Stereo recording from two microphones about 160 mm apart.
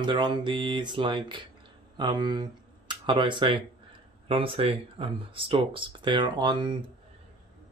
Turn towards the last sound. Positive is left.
turn(degrees=-30)  # may be behind; listen again after turning